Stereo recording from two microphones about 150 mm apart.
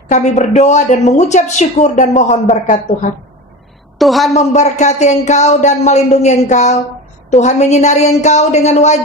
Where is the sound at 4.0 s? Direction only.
Centre (ahead or behind).